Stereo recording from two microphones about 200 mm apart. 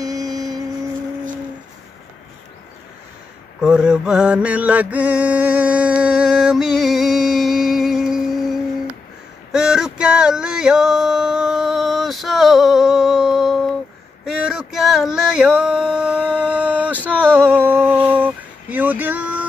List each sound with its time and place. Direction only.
0.0 s vehicle: 20° right (ahead or behind)
3.6 s mantra: 5° right (ahead or behind)
9.5 s male singing: 5° right (ahead or behind)
17.0 s a sound: 10° right (ahead or behind)